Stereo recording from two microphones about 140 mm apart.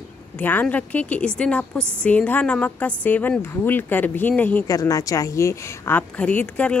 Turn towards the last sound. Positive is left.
turn(degrees=10)  # may be behind; listen again after turning